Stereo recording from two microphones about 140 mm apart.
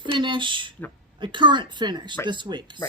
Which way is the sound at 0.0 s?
35° right (ahead or behind).